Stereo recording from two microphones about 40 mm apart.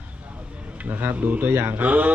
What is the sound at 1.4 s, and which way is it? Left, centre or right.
Speech, right.